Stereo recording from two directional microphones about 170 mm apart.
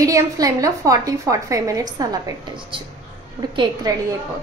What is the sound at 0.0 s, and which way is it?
A woman's voice, 20° right (ahead or behind).